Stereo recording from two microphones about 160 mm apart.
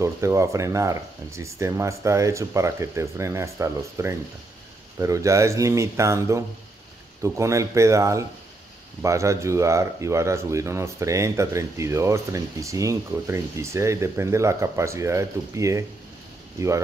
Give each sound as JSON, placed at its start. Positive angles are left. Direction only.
{"t": 0.0, "sound": "speech", "side_deg": -20}